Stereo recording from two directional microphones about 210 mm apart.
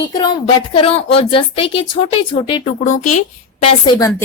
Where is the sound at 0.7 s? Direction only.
25° left (ahead or behind).